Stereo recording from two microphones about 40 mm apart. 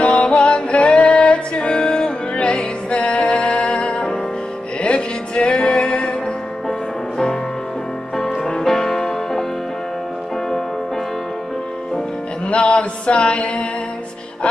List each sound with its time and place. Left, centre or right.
0.0 s music: left
6.7 s music: centre
12.4 s mantra: left